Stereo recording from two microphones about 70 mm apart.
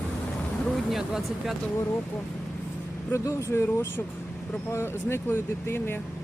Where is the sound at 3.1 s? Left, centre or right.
Left.